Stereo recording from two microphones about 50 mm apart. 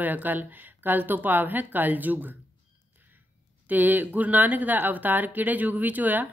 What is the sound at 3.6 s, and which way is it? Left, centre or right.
Speech, right.